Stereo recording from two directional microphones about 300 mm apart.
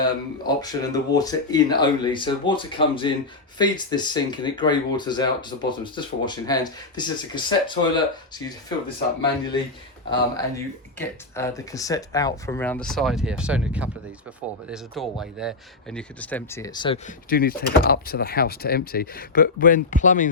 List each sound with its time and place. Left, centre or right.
0.0 s speech: centre
10.1 s speech: centre
17.2 s speech: left